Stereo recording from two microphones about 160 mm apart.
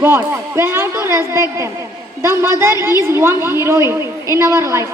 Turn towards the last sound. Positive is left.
turn(degrees=-15)  # may be behind; listen again after turning